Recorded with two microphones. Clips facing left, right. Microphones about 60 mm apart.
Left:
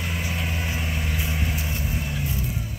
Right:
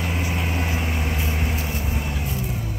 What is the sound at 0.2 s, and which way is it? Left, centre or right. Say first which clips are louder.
Vehicle: right 3 dB; centre.